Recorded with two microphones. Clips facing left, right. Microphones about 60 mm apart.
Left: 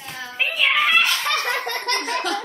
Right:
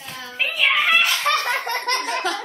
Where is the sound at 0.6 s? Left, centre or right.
Centre.